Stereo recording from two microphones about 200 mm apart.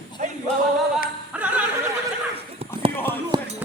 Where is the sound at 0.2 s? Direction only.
35° right (ahead or behind).